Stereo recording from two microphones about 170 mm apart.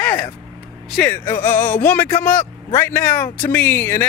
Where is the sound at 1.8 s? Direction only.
10° left (ahead or behind).